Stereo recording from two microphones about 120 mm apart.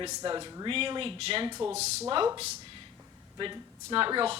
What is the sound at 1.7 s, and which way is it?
Speech, 65° right (ahead or behind).